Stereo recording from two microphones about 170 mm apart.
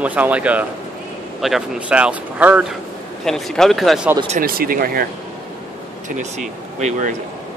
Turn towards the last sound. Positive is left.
turn(degrees=-45)  # may be behind; listen again after turning